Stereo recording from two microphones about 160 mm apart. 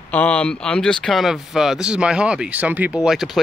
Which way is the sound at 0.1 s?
10° left (ahead or behind).